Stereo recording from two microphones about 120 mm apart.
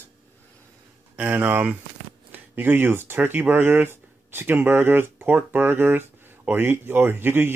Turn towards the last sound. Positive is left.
turn(degrees=-20)  # may be behind; listen again after turning